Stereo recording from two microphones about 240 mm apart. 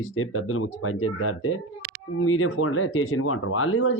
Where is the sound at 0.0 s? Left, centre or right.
Left.